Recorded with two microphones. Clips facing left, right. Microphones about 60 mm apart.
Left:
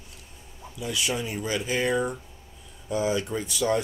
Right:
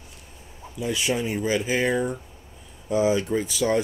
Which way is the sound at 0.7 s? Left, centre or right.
Right.